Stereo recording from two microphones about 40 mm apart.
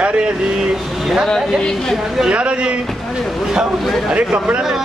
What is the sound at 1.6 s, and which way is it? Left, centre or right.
Speech, centre.